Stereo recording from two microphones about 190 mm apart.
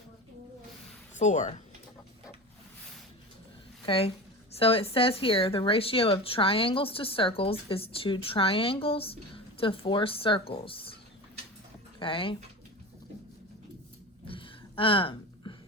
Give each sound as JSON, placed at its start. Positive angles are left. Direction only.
{"t": 1.2, "sound": "speech", "side_deg": 40}
{"t": 3.8, "sound": "speech", "side_deg": 30}
{"t": 11.9, "sound": "speech", "side_deg": 25}
{"t": 14.3, "sound": "a sound", "side_deg": 30}